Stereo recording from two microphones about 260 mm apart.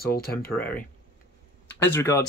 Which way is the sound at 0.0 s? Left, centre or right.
Left.